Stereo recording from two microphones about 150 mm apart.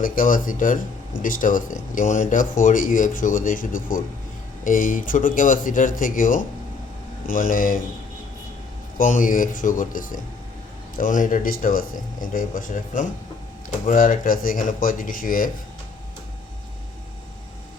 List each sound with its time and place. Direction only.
0.0 s speech: 65° left (ahead or behind)
9.0 s speech: 60° left (ahead or behind)